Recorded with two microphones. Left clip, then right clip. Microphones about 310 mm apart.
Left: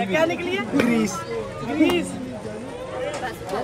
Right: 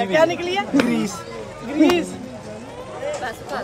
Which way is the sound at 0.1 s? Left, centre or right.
Right.